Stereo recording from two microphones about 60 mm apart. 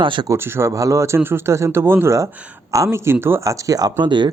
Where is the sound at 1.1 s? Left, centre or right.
Right.